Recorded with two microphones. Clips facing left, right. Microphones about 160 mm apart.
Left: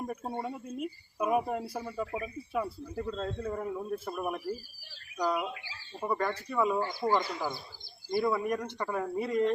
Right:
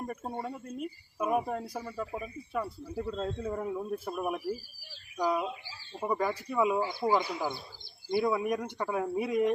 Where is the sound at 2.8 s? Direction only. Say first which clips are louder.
Right 1 dB; 10° right (ahead or behind).